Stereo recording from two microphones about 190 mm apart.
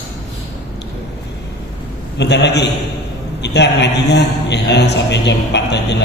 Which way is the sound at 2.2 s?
65° left (ahead or behind).